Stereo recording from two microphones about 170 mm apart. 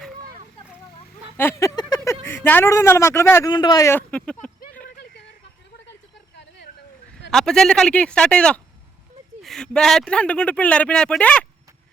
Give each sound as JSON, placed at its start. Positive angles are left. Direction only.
{"t": 1.4, "sound": "a sound", "side_deg": 15}
{"t": 2.2, "sound": "speech", "side_deg": 10}
{"t": 3.5, "sound": "speech", "side_deg": 25}
{"t": 7.3, "sound": "speech", "side_deg": 5}